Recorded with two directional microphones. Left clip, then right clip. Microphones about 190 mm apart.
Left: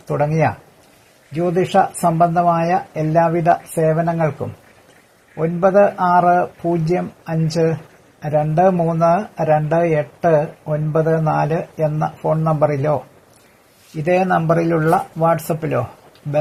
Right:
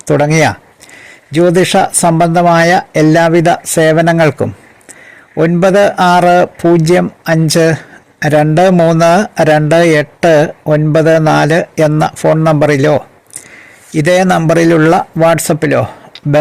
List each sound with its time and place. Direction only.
0.0 s speech: 60° right (ahead or behind)